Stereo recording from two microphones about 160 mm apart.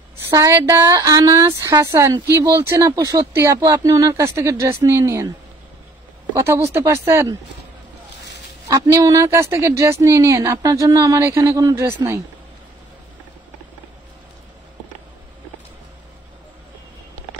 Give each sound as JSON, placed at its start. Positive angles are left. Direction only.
{"t": 0.3, "sound": "speech", "side_deg": -20}
{"t": 6.3, "sound": "speech", "side_deg": -15}
{"t": 8.6, "sound": "speech", "side_deg": -20}